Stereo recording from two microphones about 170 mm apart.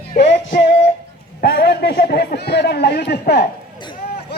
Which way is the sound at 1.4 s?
65° left (ahead or behind).